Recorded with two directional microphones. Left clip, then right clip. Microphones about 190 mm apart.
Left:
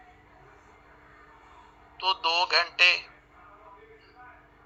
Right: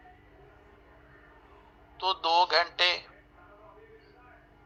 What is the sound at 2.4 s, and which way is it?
Speech, 25° right (ahead or behind).